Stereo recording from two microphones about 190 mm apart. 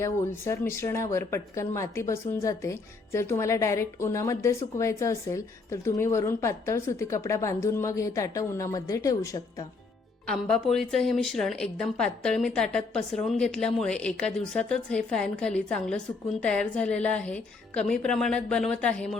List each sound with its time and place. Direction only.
0.0 s speech: 15° left (ahead or behind)
10.2 s a woman's voice: centre (ahead or behind)